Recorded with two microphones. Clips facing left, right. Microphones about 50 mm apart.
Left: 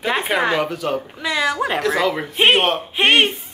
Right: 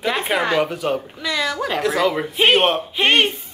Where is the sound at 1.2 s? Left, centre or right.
Left.